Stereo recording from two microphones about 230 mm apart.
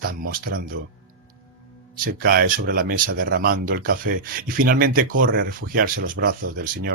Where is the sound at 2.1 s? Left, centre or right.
Right.